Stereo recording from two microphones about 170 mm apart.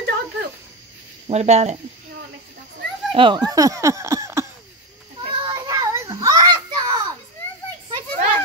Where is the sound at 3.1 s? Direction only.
30° right (ahead or behind).